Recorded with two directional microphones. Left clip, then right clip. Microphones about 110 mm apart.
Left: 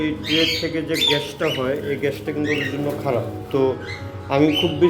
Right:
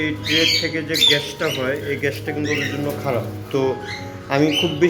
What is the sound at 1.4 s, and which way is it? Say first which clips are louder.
Speech: even; 10° left (ahead or behind).